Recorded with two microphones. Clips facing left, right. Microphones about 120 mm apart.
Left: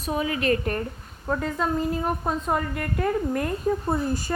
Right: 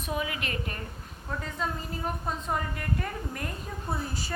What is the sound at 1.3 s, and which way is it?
A woman's voice, 60° left (ahead or behind).